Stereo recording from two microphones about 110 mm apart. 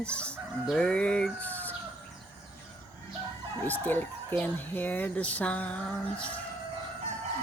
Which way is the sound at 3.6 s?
15° left (ahead or behind).